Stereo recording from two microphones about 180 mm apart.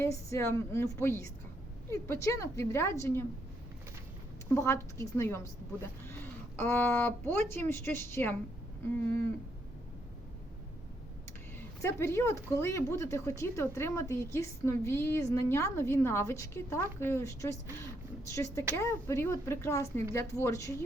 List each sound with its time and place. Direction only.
0.0 s speech: 15° left (ahead or behind)
4.4 s speech: 15° left (ahead or behind)
6.6 s speech: 15° left (ahead or behind)
11.8 s speech: 15° left (ahead or behind)